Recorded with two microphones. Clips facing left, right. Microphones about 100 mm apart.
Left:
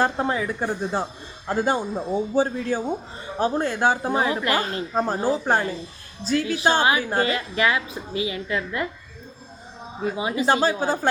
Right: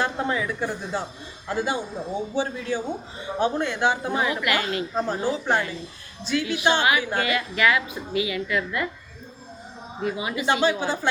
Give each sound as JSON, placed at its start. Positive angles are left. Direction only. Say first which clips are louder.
{"t": 0.0, "sound": "a woman's voice", "louder": "left 3 dB", "side_deg": 35}
{"t": 10.0, "sound": "a woman's voice", "louder": "left 3 dB", "side_deg": 30}